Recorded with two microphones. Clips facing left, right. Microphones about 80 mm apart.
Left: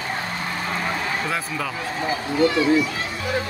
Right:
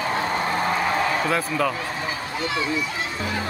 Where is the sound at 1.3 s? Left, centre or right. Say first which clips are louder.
Right 4 dB; centre.